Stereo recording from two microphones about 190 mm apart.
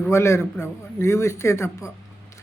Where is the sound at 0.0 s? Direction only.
15° left (ahead or behind).